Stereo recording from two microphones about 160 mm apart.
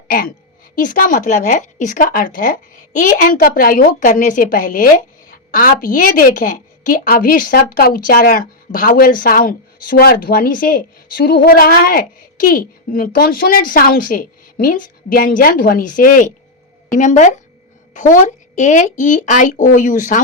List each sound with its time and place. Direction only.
0.1 s a woman's voice: 60° left (ahead or behind)